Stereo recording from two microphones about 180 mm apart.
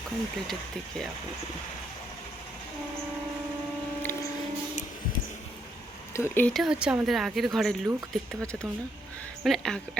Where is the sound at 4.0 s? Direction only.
15° left (ahead or behind).